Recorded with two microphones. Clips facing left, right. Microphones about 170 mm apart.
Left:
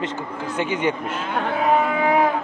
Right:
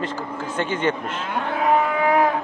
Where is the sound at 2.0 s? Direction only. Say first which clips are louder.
Right 1 dB; 10° left (ahead or behind).